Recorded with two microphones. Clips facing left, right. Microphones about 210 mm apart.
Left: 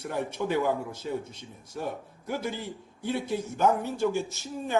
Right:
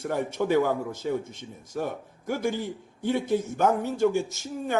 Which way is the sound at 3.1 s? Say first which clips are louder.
Right 5 dB; 50° right (ahead or behind).